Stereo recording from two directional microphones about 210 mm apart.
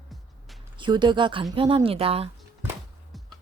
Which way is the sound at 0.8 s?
20° right (ahead or behind).